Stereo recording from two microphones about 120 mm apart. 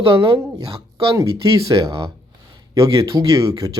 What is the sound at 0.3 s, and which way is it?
Speech, 35° right (ahead or behind).